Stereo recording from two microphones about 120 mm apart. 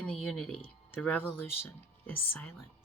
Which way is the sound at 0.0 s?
15° left (ahead or behind).